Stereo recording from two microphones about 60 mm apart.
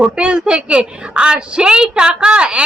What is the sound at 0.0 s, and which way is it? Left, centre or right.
A woman's voice, centre.